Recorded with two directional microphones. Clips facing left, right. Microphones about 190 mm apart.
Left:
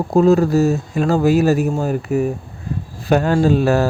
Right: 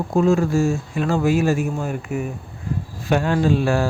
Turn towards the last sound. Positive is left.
turn(degrees=40)  # may be behind; listen again after turning